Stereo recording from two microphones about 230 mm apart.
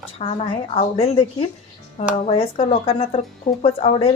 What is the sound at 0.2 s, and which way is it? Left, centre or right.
Speech, left.